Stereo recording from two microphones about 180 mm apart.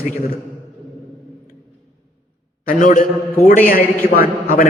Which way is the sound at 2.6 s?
50° left (ahead or behind).